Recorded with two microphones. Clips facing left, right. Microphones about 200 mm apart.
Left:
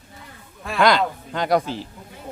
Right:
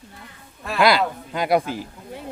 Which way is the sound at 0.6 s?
5° right (ahead or behind).